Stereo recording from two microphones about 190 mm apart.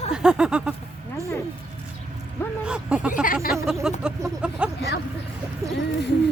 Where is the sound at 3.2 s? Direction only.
50° left (ahead or behind).